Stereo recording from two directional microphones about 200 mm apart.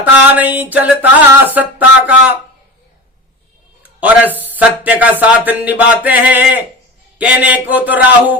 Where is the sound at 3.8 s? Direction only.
10° right (ahead or behind).